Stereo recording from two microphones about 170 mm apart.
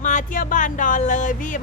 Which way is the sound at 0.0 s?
50° left (ahead or behind).